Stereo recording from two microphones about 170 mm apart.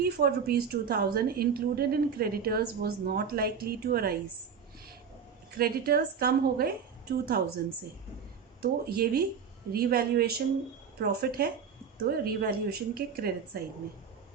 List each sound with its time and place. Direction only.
0.0 s a woman's voice: 65° right (ahead or behind)
5.5 s a woman's voice: 65° right (ahead or behind)
8.6 s a woman's voice: 65° right (ahead or behind)